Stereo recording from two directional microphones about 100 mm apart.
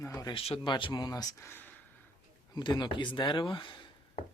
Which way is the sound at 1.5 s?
20° left (ahead or behind).